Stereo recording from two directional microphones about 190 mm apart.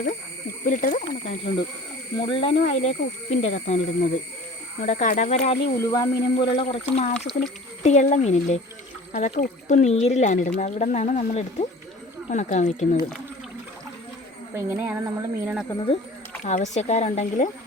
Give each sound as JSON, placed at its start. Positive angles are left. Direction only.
{"t": 0.6, "sound": "speech", "side_deg": 45}
{"t": 2.1, "sound": "speech", "side_deg": 25}
{"t": 5.9, "sound": "speech", "side_deg": 20}
{"t": 14.5, "sound": "speech", "side_deg": -10}
{"t": 15.7, "sound": "speech", "side_deg": 25}
{"t": 16.4, "sound": "speech", "side_deg": 35}